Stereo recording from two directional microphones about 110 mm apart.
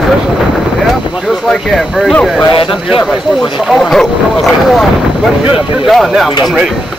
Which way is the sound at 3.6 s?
Centre (ahead or behind).